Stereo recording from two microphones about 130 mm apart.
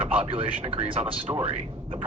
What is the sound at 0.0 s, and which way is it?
Speech, 45° right (ahead or behind).